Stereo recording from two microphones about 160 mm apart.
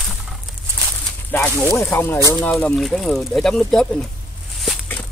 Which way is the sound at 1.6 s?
15° left (ahead or behind).